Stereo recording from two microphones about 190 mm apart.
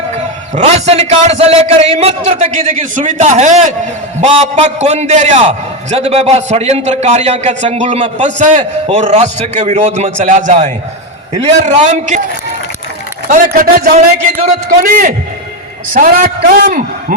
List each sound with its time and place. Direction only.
0.5 s a man's voice: 35° right (ahead or behind)
13.3 s a man's voice: 50° right (ahead or behind)